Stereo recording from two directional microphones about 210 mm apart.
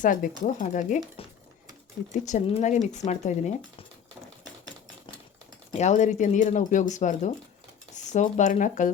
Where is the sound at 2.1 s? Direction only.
35° left (ahead or behind).